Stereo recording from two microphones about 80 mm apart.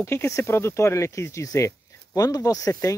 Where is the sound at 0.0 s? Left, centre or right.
Left.